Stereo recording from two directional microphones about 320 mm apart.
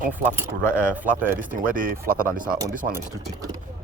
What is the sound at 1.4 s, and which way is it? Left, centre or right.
Speech, right.